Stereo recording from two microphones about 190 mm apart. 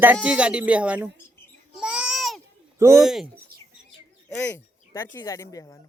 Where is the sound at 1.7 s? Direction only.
5° right (ahead or behind).